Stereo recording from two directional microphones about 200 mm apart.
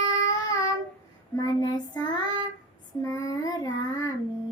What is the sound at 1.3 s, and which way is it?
Child singing, 20° left (ahead or behind).